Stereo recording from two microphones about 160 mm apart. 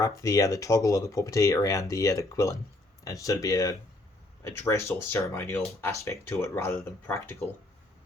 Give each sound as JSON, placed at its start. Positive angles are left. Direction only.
{"t": 0.0, "sound": "speech", "side_deg": 20}